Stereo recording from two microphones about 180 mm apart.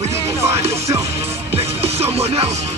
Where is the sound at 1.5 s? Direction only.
30° right (ahead or behind).